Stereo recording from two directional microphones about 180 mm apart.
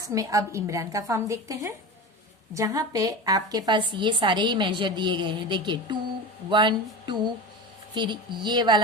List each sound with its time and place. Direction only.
0.0 s a woman's voice: 20° right (ahead or behind)